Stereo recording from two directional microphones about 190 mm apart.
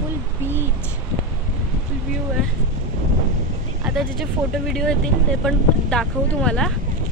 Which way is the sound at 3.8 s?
Centre (ahead or behind).